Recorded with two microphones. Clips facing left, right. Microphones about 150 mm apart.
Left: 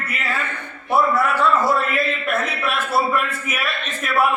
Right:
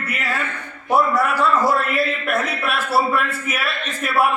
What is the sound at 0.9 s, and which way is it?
Speech, 40° right (ahead or behind).